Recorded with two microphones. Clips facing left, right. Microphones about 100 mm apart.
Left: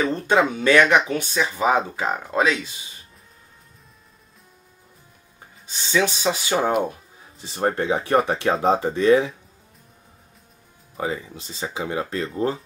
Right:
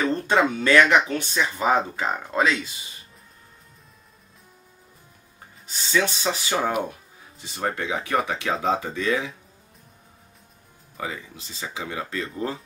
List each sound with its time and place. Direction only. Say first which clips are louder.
0.0 s speech: left 2 dB; 5° left (ahead or behind)
5.9 s speech: left 2 dB; 10° left (ahead or behind)
7.4 s speech: left 5 dB; 35° left (ahead or behind)
11.6 s speech: left 5 dB; 30° left (ahead or behind)